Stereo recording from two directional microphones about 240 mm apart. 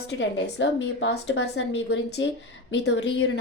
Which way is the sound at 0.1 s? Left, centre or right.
Left.